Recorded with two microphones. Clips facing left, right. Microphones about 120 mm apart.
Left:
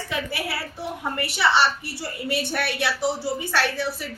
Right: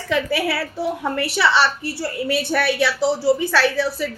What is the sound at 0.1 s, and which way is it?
A woman's voice, 90° right.